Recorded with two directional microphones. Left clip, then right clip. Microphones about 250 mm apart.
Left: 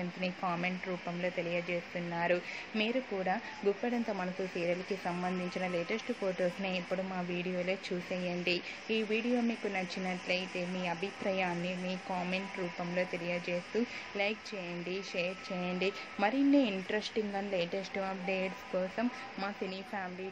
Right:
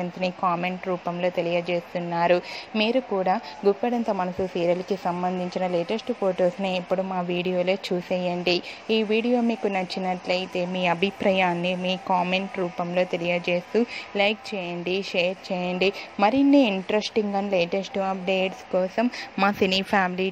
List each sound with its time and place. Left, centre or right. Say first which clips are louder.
0.2 s a woman's voice: right 11 dB; centre; by 20.1 s right